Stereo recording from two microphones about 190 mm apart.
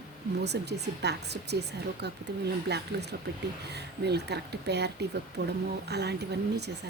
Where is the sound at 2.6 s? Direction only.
60° right (ahead or behind).